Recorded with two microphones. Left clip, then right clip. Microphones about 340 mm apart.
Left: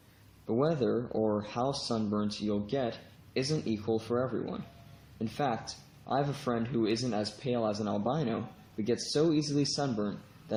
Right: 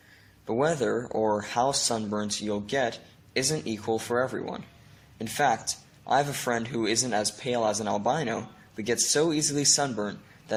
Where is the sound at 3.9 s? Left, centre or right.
Right.